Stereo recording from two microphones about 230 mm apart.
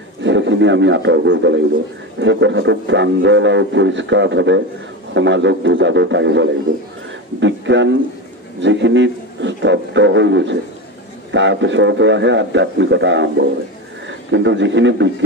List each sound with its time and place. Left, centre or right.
0.2 s a man's voice: right